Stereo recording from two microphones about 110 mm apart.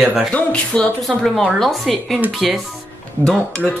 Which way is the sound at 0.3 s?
10° left (ahead or behind).